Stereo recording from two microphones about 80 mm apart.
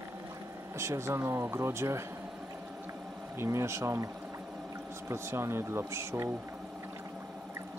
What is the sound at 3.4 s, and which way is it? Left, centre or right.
Speech, right.